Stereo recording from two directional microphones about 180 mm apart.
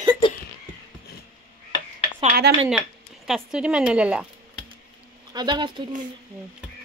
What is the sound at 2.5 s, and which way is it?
Speech, 65° right (ahead or behind).